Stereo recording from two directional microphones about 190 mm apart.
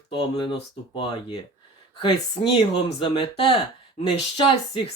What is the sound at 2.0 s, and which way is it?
Speech, 25° left (ahead or behind).